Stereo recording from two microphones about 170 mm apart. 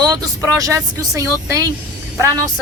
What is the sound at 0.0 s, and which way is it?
Speech, 20° right (ahead or behind).